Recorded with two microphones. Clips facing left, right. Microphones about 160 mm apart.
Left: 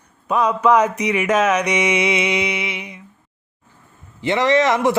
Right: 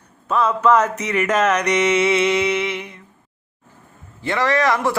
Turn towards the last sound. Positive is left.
turn(degrees=20)  # may be behind; listen again after turning